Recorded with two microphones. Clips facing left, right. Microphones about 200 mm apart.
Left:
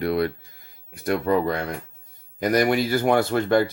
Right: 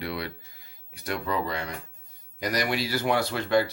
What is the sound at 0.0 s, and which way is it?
Speech, 50° left (ahead or behind).